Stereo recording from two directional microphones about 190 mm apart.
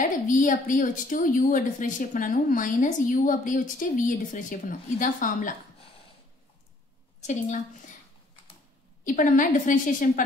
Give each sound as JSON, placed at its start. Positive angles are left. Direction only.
{"t": 0.0, "sound": "a woman's voice", "side_deg": 45}
{"t": 7.2, "sound": "a woman's voice", "side_deg": 40}
{"t": 9.0, "sound": "a woman's voice", "side_deg": 45}